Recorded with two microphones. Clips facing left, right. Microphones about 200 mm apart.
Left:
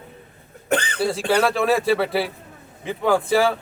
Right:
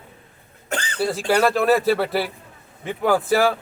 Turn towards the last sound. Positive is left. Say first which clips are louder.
# even
turn(degrees=0)  # may be behind; listen again after turning